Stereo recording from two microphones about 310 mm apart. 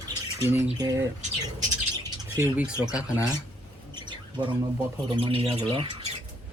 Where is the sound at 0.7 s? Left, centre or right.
Centre.